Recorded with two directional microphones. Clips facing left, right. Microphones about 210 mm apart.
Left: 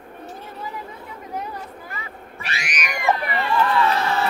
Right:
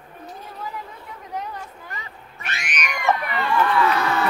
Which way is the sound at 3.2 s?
30° left (ahead or behind).